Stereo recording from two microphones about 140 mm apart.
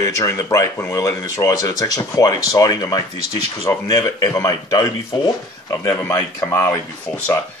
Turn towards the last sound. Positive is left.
turn(degrees=20)  # may be behind; listen again after turning